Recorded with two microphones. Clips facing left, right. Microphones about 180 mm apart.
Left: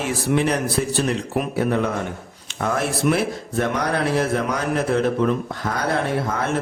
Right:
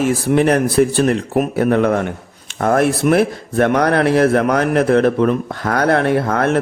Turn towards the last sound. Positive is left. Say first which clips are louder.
# right 7 dB
turn(degrees=-60)  # may be behind; listen again after turning